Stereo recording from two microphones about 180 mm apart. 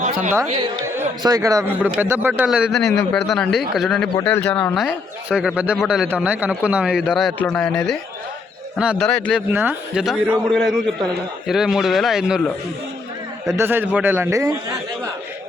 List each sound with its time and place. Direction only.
1.2 s a man's voice: 20° right (ahead or behind); by 9.4 s 5° left (ahead or behind)
9.5 s a man's voice: 10° right (ahead or behind)
13.5 s a man's voice: 10° right (ahead or behind)